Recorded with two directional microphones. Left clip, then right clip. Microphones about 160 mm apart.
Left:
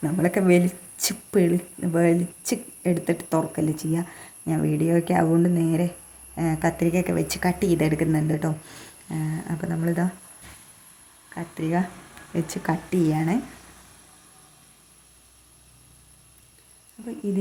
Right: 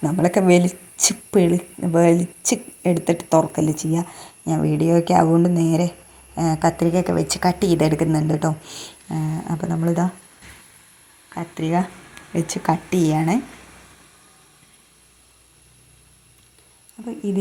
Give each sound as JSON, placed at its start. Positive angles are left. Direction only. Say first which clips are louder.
{"t": 0.0, "sound": "a woman's voice", "louder": "right 5 dB", "side_deg": -20}
{"t": 8.6, "sound": "speech", "louder": "right 8 dB", "side_deg": -5}
{"t": 9.0, "sound": "a woman's voice", "louder": "right 4 dB", "side_deg": -20}
{"t": 11.3, "sound": "a woman's voice", "louder": "right 4 dB", "side_deg": -15}